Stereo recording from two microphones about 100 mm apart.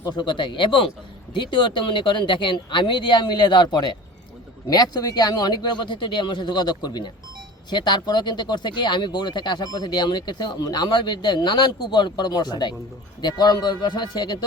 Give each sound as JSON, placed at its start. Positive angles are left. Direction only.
{"t": 0.2, "sound": "speech", "side_deg": 50}